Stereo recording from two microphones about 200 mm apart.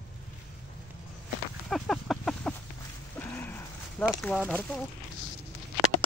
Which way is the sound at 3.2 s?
10° left (ahead or behind).